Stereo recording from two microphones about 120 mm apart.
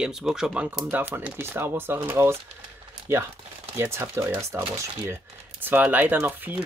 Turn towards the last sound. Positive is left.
turn(degrees=-15)  # may be behind; listen again after turning